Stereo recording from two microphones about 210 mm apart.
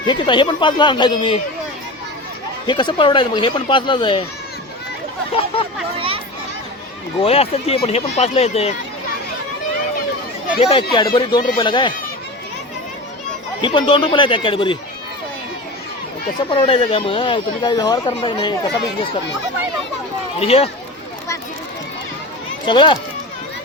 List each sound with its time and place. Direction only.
0.1 s speech: 20° left (ahead or behind)
2.6 s speech: 20° left (ahead or behind)
5.3 s speech: 25° left (ahead or behind)
7.2 s speech: 25° left (ahead or behind)
10.6 s speech: 25° left (ahead or behind)
13.6 s speech: 25° left (ahead or behind)
16.5 s speech: 25° left (ahead or behind)
20.4 s speech: 25° left (ahead or behind)
22.6 s speech: 20° left (ahead or behind)